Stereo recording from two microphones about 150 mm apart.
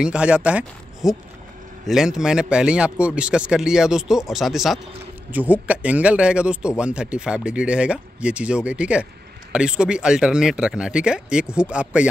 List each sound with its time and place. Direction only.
0.0 s speech: 5° right (ahead or behind)